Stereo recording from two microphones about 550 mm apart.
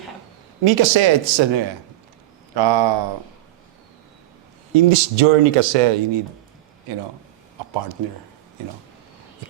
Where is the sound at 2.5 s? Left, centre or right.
Right.